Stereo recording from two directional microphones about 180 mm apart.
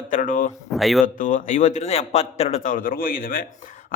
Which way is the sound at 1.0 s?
45° left (ahead or behind).